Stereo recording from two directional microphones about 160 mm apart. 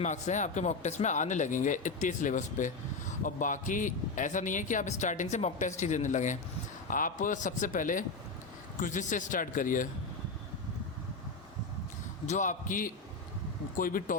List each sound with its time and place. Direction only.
0.0 s speech: 50° left (ahead or behind)
12.2 s speech: 50° left (ahead or behind)